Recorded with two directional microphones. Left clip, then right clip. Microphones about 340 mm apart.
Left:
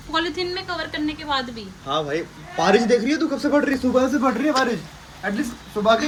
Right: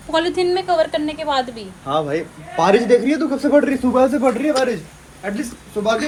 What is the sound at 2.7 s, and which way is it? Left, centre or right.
A man's voice, centre.